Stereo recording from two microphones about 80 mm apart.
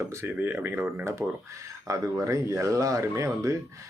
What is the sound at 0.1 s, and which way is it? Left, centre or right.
Speech, right.